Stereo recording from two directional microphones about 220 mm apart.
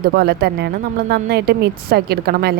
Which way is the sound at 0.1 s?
45° right (ahead or behind).